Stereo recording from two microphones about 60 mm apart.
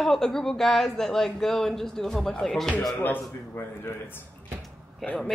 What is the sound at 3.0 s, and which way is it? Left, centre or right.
Speech, left.